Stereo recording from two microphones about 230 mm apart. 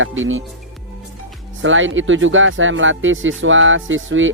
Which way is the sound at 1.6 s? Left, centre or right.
Right.